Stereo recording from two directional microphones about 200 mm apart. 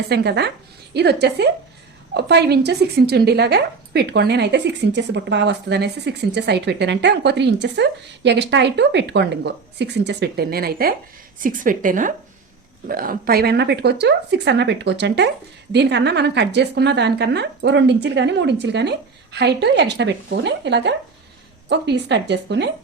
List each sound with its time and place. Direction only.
0.1 s a woman's voice: 55° right (ahead or behind)